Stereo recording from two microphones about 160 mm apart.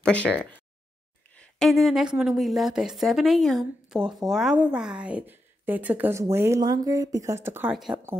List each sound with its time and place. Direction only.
0.0 s speech: 5° left (ahead or behind); by 7.7 s 15° right (ahead or behind)
7.7 s speech: centre (ahead or behind)